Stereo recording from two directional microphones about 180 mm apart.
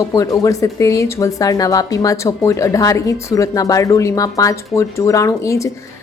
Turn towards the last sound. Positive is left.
turn(degrees=15)  # may be behind; listen again after turning